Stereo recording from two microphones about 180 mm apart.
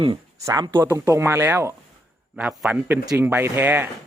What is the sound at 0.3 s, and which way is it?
Speech, 20° right (ahead or behind).